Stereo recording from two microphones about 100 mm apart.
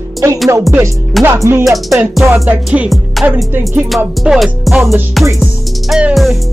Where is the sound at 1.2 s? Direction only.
25° right (ahead or behind).